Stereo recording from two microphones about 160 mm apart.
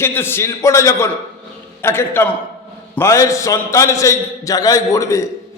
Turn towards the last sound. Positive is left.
turn(degrees=20)  # may be behind; listen again after turning